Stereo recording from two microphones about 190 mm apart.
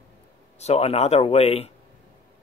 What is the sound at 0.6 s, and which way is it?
Speech, 35° left (ahead or behind).